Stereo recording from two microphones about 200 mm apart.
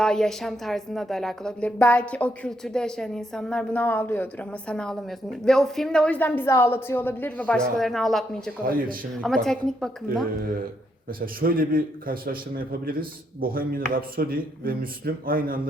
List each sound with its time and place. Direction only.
0.0 s a woman's voice: 5° left (ahead or behind)
8.6 s a man's voice: 45° right (ahead or behind)
9.2 s a woman's voice: 5° left (ahead or behind)
11.2 s a man's voice: 45° right (ahead or behind)